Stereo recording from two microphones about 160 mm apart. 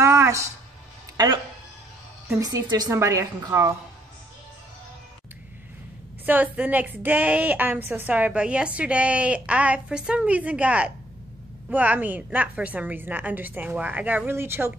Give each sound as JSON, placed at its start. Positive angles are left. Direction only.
{"t": 0.0, "sound": "music", "side_deg": -15}
{"t": 2.2, "sound": "a woman's voice", "side_deg": -20}
{"t": 6.2, "sound": "a woman's voice", "side_deg": -10}